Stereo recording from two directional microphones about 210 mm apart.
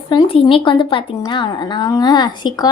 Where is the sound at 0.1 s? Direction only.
25° left (ahead or behind).